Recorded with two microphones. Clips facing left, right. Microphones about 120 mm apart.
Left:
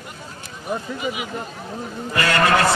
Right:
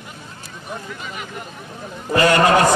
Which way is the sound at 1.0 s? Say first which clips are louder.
Left 6 dB; 10° left (ahead or behind).